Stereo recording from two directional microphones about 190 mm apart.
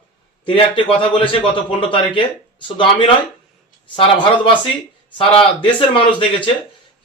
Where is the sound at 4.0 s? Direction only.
25° left (ahead or behind).